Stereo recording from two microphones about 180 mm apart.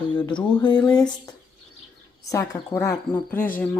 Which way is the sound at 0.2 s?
25° left (ahead or behind).